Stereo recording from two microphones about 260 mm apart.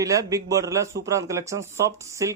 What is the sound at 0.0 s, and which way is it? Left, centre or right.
Speech, centre.